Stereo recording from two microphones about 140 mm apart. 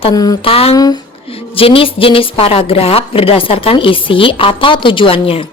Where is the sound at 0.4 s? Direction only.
45° left (ahead or behind).